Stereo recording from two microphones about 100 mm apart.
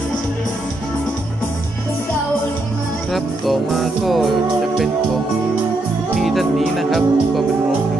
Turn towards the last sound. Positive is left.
turn(degrees=0)  # may be behind; listen again after turning